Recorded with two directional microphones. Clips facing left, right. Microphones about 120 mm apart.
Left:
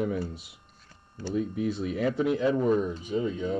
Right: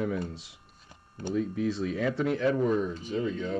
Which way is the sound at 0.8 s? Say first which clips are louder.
Right 1 dB; 15° right (ahead or behind).